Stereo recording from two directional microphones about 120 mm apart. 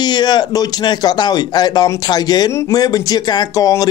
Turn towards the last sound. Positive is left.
turn(degrees=30)  # may be behind; listen again after turning